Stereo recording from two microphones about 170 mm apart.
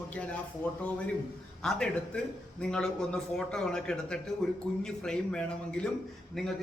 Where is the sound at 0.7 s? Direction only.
10° left (ahead or behind).